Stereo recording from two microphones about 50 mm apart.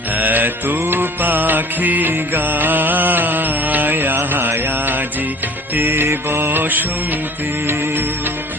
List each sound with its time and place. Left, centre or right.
0.2 s mantra: right
0.8 s music: right
7.7 s music: right